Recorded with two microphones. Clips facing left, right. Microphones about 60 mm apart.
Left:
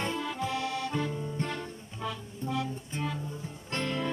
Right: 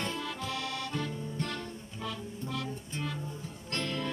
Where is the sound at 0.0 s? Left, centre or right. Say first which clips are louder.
Left 4 dB; centre.